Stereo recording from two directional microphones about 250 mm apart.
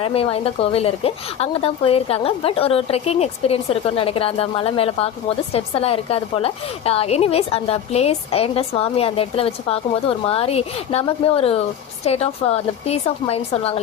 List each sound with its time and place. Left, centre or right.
0.0 s a woman's voice: left